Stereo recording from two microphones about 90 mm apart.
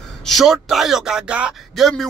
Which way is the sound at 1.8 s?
Centre (ahead or behind).